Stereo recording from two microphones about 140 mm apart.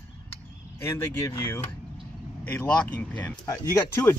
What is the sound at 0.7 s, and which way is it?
Speech, 15° left (ahead or behind).